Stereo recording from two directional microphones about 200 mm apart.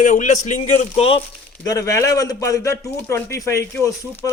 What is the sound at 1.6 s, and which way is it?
A man's voice, 15° left (ahead or behind).